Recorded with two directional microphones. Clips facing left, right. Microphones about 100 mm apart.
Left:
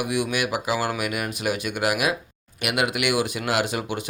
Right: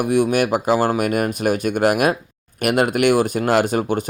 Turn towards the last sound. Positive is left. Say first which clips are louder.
# right 7 dB
turn(degrees=-45)  # may be behind; listen again after turning